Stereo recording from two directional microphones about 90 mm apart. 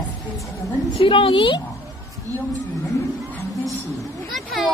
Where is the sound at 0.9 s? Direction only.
80° left; by 1.6 s 65° left (ahead or behind).